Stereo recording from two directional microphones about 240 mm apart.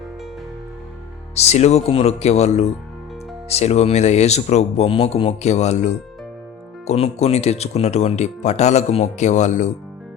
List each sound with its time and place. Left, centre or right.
1.4 s speech: left